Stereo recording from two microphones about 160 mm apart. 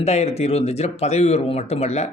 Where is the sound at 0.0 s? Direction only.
40° left (ahead or behind).